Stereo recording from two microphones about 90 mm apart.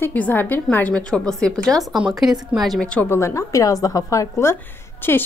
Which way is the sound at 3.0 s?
30° left (ahead or behind).